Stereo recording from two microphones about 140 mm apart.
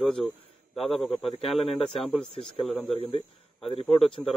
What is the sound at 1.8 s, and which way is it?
Speech, centre (ahead or behind).